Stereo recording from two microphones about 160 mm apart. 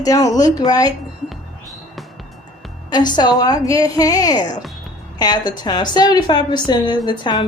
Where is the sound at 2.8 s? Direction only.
25° left (ahead or behind).